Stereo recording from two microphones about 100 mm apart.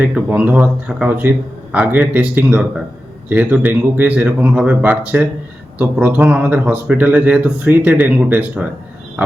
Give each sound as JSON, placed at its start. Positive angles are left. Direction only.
{"t": 0.0, "sound": "a man's voice", "side_deg": -10}